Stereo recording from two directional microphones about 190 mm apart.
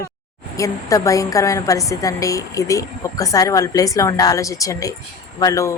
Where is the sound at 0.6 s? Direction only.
15° left (ahead or behind).